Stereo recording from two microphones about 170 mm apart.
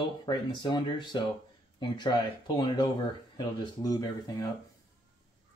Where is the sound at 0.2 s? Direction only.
25° left (ahead or behind).